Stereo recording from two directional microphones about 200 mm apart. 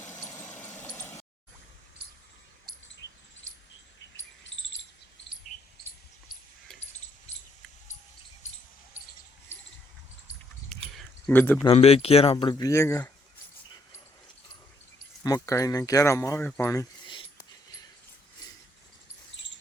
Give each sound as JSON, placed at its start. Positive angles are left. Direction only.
{"t": 0.0, "sound": "engine", "side_deg": 5}
{"t": 10.9, "sound": "a sound", "side_deg": 10}
{"t": 11.6, "sound": "speech", "side_deg": 30}
{"t": 15.2, "sound": "speech", "side_deg": 15}
{"t": 19.4, "sound": "cricket", "side_deg": 60}